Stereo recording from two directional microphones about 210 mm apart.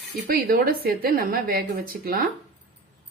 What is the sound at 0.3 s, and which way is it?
Speech, 45° right (ahead or behind).